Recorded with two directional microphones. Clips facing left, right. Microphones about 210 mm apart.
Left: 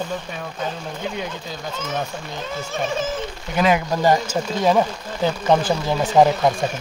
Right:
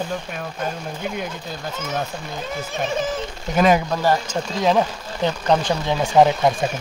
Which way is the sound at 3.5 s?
45° right (ahead or behind).